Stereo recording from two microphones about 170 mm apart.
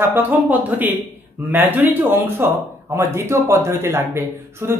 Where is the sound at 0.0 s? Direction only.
10° right (ahead or behind).